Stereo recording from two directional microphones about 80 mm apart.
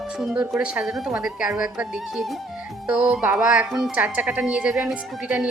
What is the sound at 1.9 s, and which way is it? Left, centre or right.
A woman's voice, centre.